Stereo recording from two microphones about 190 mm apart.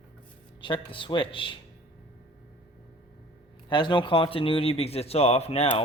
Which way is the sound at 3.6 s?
25° left (ahead or behind).